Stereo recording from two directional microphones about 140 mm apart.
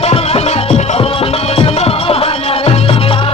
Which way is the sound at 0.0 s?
45° left (ahead or behind).